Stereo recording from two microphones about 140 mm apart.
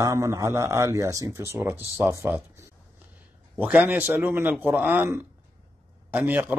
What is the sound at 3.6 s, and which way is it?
A man's voice, 10° right (ahead or behind).